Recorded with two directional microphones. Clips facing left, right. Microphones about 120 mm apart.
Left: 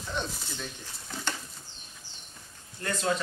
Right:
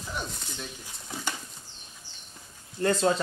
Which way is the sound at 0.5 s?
10° right (ahead or behind).